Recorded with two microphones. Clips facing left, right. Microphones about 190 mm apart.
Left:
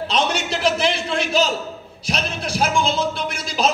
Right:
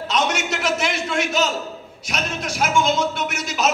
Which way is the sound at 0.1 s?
30° left (ahead or behind).